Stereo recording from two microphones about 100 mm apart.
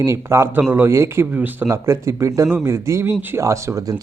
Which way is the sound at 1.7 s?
30° right (ahead or behind).